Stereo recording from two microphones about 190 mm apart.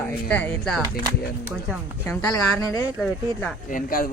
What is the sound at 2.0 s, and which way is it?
Speech, 20° left (ahead or behind).